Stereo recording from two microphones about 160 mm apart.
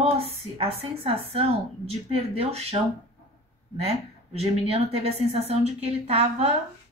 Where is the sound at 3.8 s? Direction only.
40° right (ahead or behind).